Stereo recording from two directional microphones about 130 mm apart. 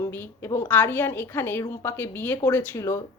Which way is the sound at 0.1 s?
15° left (ahead or behind).